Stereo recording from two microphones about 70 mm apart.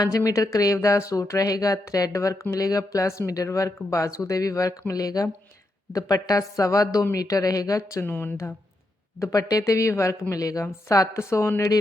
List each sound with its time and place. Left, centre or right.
0.3 s a woman's voice: left
8.0 s a woman's voice: left
9.1 s speech: left
10.3 s speech: left